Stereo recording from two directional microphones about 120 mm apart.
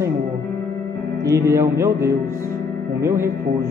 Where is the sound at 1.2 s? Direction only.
25° right (ahead or behind).